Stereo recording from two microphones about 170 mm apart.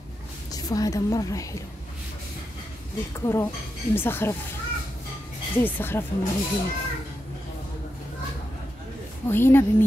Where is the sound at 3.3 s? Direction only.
15° left (ahead or behind).